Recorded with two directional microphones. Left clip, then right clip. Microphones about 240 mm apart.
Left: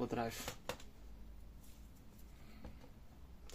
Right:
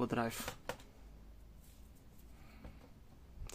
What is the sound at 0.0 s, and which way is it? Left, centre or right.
Speech, right.